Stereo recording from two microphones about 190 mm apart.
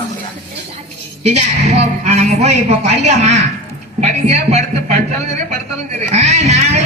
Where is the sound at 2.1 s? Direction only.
35° right (ahead or behind).